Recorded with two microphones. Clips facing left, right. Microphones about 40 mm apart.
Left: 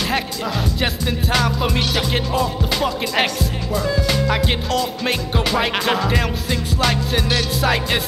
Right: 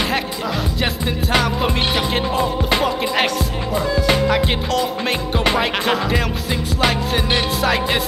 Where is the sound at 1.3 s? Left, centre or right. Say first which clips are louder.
Right 2 dB; centre.